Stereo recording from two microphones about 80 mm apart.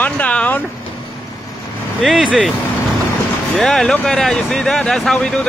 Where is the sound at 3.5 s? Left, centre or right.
Centre.